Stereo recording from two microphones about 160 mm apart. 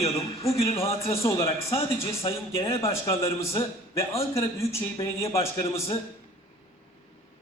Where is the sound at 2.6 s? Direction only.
35° left (ahead or behind).